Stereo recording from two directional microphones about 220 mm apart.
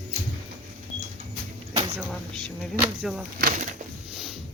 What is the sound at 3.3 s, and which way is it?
Speech, 35° right (ahead or behind).